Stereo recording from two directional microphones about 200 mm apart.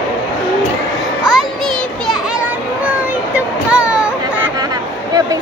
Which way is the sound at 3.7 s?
5° right (ahead or behind).